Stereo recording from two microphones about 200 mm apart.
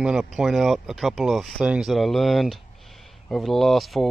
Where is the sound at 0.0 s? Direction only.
Centre (ahead or behind).